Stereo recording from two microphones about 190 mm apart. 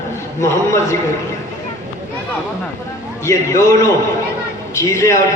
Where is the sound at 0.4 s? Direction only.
15° left (ahead or behind).